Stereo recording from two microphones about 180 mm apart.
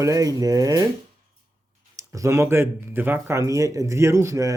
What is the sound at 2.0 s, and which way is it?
Speech, 15° right (ahead or behind).